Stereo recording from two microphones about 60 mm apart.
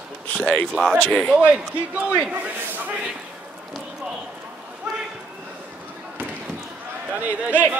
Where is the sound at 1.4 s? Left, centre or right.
Right.